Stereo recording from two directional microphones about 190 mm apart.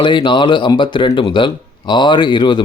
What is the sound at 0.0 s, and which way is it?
Speech, 25° left (ahead or behind).